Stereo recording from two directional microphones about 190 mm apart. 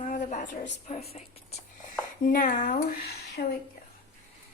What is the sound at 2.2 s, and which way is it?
Speech, 45° left (ahead or behind).